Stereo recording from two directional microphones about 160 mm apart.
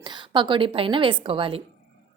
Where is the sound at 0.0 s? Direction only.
30° right (ahead or behind).